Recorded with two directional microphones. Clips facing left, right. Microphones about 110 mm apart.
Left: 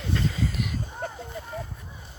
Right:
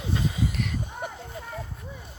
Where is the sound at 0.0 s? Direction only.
15° right (ahead or behind).